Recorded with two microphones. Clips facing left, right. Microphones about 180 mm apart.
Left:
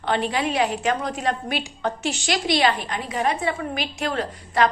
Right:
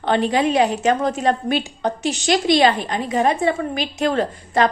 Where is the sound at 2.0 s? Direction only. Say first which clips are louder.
Right 8 dB; 20° right (ahead or behind).